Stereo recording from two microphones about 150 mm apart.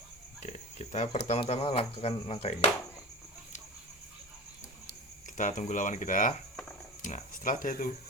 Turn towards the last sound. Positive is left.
turn(degrees=65)  # may be behind; listen again after turning